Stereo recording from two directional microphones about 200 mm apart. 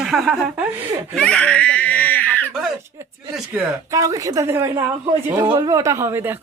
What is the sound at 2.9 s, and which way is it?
A woman's voice, 15° right (ahead or behind).